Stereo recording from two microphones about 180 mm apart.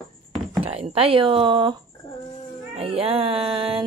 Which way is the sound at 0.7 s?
35° right (ahead or behind).